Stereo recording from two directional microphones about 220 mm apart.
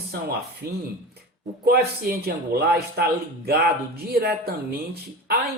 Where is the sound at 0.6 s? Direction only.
45° right (ahead or behind).